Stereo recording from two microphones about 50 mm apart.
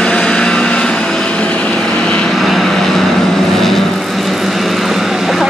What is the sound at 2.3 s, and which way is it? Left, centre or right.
Vehicle, centre.